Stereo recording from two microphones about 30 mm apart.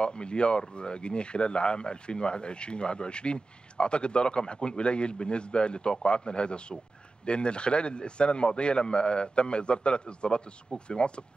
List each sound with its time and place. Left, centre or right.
0.0 s speech: left